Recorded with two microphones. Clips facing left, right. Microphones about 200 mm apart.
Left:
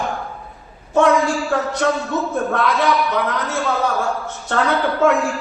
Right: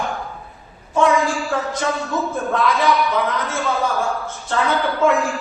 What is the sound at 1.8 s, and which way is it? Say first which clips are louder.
Speech: left 6 dB; 60° left (ahead or behind).